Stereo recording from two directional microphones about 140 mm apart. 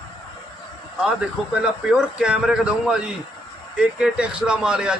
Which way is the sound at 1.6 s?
5° right (ahead or behind).